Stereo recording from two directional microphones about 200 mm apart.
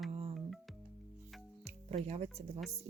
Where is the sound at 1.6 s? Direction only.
35° right (ahead or behind).